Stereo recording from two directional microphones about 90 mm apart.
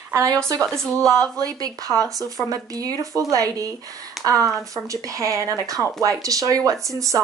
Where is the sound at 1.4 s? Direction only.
45° right (ahead or behind).